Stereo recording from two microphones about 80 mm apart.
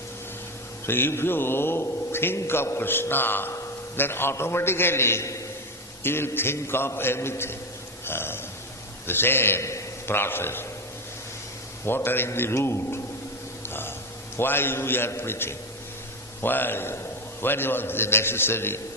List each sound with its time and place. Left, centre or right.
0.9 s a man's voice: left
11.9 s a man's voice: left
13.6 s a sound: left
14.3 s a man's voice: left